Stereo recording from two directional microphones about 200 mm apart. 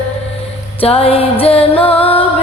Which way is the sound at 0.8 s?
30° left (ahead or behind).